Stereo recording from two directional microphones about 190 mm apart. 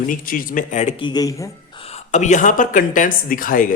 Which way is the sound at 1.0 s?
20° left (ahead or behind).